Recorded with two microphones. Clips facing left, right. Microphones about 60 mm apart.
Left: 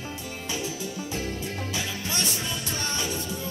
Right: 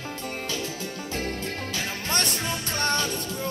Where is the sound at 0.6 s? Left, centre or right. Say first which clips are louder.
Even; right.